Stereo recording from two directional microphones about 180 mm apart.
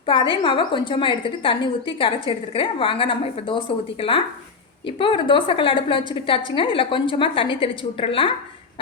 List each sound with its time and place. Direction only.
0.0 s a woman's voice: 30° left (ahead or behind)
4.9 s a woman's voice: 30° left (ahead or behind)